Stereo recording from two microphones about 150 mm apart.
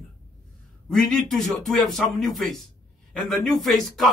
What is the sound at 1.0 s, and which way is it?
A man's voice, 5° left (ahead or behind).